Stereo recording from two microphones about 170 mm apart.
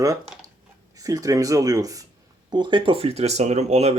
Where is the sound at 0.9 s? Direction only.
20° right (ahead or behind).